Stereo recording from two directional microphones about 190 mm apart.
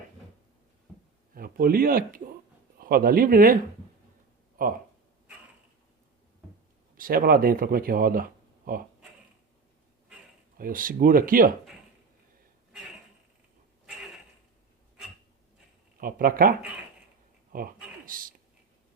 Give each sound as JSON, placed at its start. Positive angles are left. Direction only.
{"t": 1.3, "sound": "speech", "side_deg": -50}
{"t": 6.9, "sound": "speech", "side_deg": -50}
{"t": 10.6, "sound": "speech", "side_deg": -45}
{"t": 16.0, "sound": "speech", "side_deg": -50}
{"t": 18.0, "sound": "a sound", "side_deg": -45}